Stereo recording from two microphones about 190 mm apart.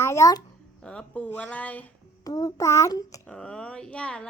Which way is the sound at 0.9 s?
5° left (ahead or behind).